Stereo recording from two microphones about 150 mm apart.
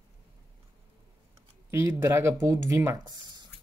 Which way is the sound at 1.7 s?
15° right (ahead or behind).